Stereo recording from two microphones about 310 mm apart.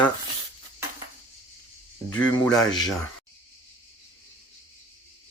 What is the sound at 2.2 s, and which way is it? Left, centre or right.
Speech, centre.